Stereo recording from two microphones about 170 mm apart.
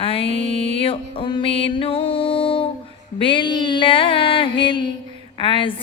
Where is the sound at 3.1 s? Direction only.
30° left (ahead or behind).